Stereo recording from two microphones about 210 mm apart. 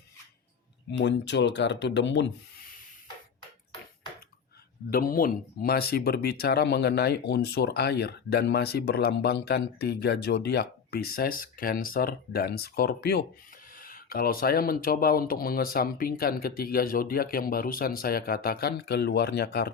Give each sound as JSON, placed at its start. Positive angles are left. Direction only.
{"t": 0.9, "sound": "speech", "side_deg": 55}
{"t": 4.9, "sound": "speech", "side_deg": 45}